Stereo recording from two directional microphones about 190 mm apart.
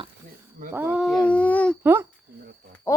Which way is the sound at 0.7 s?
10° right (ahead or behind).